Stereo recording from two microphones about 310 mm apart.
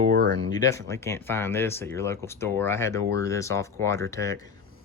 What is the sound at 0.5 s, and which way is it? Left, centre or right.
Speech, centre.